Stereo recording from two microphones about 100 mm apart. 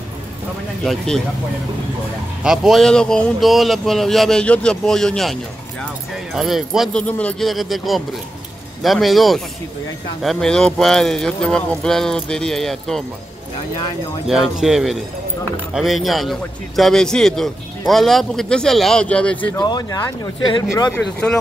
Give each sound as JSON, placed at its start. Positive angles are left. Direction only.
{"t": 0.8, "sound": "a man's voice", "side_deg": 5}
{"t": 2.4, "sound": "a man's voice", "side_deg": -5}
{"t": 7.0, "sound": "speech", "side_deg": 15}
{"t": 7.3, "sound": "a man's voice", "side_deg": 0}
{"t": 14.2, "sound": "a man's voice", "side_deg": -5}
{"t": 19.6, "sound": "speech", "side_deg": 45}